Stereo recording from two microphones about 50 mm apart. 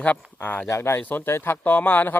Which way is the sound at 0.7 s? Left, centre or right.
Left.